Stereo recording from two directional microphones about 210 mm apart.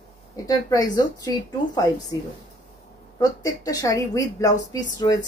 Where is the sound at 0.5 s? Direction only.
20° left (ahead or behind).